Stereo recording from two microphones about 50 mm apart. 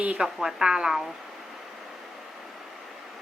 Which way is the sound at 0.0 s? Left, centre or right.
Right.